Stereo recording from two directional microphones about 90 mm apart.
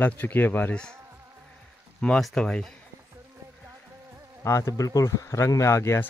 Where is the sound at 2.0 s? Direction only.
10° left (ahead or behind).